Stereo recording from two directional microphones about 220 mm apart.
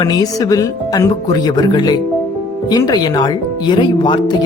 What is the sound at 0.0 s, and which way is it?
Speech, 15° left (ahead or behind).